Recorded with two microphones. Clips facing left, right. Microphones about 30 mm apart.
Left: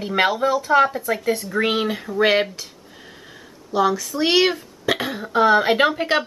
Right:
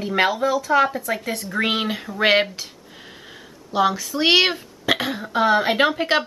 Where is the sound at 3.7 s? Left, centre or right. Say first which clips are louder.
Even; centre.